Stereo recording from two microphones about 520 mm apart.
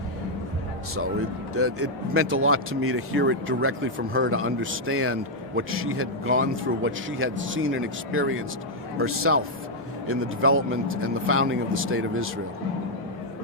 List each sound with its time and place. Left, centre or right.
1.5 s speech: right